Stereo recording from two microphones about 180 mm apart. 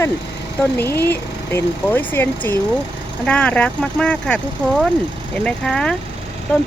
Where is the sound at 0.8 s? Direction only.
10° left (ahead or behind).